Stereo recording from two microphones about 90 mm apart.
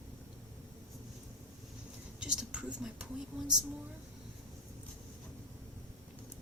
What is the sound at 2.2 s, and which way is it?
Speech, 10° right (ahead or behind).